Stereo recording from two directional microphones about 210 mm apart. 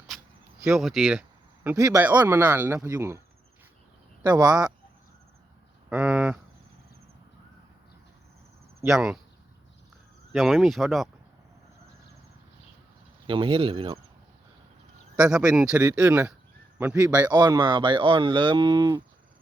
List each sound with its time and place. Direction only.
0.7 s speech: centre (ahead or behind)
1.6 s speech: 15° right (ahead or behind)
4.2 s speech: 20° right (ahead or behind)
5.9 s speech: 5° right (ahead or behind)
8.9 s speech: centre (ahead or behind)
10.3 s speech: centre (ahead or behind)
13.2 s speech: 25° right (ahead or behind)
15.1 s a man's voice: 5° right (ahead or behind)
17.2 s speech: 20° right (ahead or behind)